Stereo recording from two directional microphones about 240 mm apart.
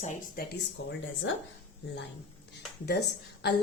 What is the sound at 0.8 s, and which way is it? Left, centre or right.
Speech, left.